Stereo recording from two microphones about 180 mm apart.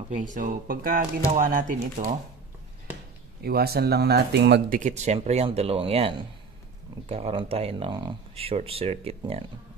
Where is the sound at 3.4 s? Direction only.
60° right (ahead or behind).